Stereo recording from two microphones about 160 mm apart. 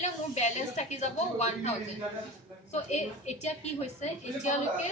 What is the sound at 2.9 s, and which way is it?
A woman's voice, 45° left (ahead or behind).